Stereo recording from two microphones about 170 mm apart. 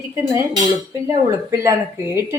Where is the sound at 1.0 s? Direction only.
15° right (ahead or behind).